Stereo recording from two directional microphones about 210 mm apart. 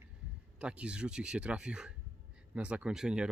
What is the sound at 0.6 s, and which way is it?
Speech, 5° right (ahead or behind).